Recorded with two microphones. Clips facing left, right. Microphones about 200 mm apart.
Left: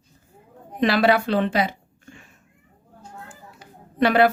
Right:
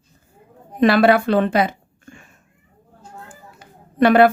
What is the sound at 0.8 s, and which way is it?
A woman's voice, 50° right (ahead or behind).